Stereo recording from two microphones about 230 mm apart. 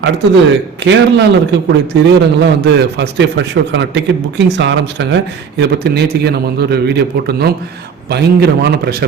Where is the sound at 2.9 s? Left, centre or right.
Right.